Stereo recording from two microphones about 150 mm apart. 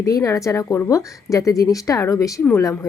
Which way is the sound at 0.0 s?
20° left (ahead or behind).